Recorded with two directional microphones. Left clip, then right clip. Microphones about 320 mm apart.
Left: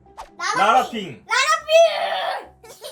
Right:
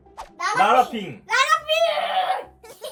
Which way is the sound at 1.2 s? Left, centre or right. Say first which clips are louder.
Even; centre.